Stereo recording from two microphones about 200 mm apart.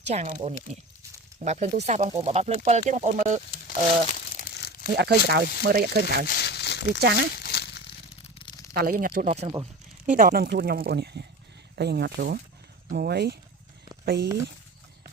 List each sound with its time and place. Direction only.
0.1 s speech: 30° right (ahead or behind)
3.7 s crumpling: 45° left (ahead or behind)
4.9 s speech: 55° right (ahead or behind)
6.2 s crumpling: 50° left (ahead or behind)
8.7 s speech: 45° right (ahead or behind)